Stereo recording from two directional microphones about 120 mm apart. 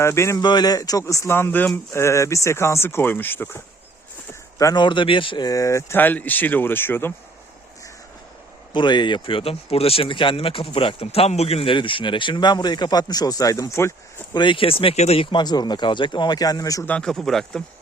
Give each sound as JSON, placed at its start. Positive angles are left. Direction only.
{"t": 0.0, "sound": "speech", "side_deg": 25}
{"t": 0.4, "sound": "speech", "side_deg": 35}
{"t": 4.5, "sound": "speech", "side_deg": 35}
{"t": 5.5, "sound": "speech", "side_deg": 25}
{"t": 8.7, "sound": "speech", "side_deg": 40}
{"t": 14.3, "sound": "speech", "side_deg": 45}
{"t": 16.8, "sound": "speech", "side_deg": 10}